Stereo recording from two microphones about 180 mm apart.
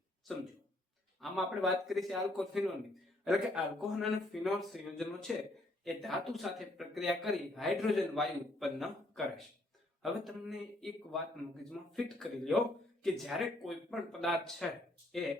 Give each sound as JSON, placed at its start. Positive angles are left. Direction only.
{"t": 1.2, "sound": "a man's voice", "side_deg": 0}